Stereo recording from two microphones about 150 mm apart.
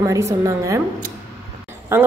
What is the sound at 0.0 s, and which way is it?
Speech, 20° right (ahead or behind).